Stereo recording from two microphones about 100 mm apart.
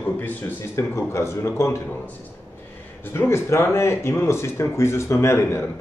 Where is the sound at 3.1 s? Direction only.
25° left (ahead or behind).